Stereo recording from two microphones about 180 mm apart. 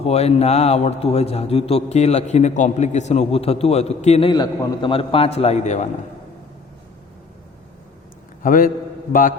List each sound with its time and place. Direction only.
0.0 s a man's voice: 35° left (ahead or behind)
4.3 s a man's voice: 25° left (ahead or behind)
8.4 s a man's voice: 50° left (ahead or behind)